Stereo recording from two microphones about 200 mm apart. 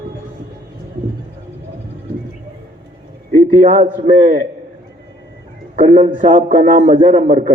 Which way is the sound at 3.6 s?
40° right (ahead or behind).